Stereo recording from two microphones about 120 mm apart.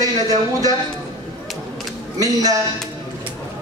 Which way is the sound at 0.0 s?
30° right (ahead or behind).